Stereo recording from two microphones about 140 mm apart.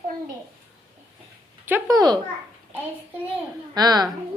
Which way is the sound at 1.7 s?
25° right (ahead or behind).